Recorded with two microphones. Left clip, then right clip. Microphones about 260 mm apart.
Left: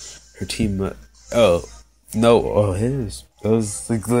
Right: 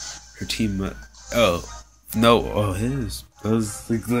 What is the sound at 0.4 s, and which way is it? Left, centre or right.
Speech, left.